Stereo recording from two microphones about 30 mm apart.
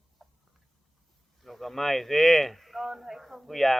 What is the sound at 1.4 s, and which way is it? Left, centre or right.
Speech, centre.